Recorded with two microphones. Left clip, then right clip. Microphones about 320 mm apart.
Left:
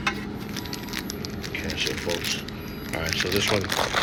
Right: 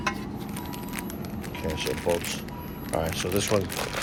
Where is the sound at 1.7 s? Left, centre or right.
Centre.